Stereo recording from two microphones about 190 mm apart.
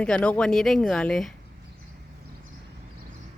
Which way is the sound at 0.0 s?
5° left (ahead or behind).